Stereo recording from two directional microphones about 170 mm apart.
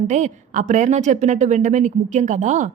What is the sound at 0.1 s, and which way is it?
A woman's voice, 45° right (ahead or behind).